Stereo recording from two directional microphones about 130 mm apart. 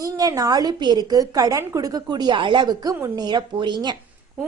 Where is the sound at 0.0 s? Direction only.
25° right (ahead or behind).